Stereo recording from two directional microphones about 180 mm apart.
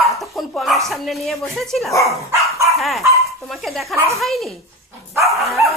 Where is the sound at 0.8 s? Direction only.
Centre (ahead or behind).